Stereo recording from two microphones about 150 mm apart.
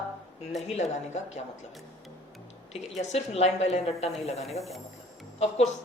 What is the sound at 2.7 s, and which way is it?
A woman's voice, 45° left (ahead or behind).